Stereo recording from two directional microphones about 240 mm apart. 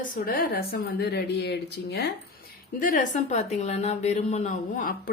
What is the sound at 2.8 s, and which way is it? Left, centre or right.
A woman's voice, left.